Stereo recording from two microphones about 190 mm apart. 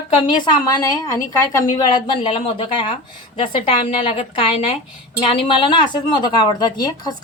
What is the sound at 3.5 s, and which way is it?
Speech, 25° left (ahead or behind).